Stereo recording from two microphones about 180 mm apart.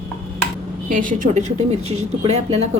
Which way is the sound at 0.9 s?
50° right (ahead or behind).